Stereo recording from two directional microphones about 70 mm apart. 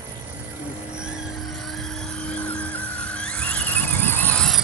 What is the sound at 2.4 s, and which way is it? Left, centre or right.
Music, centre.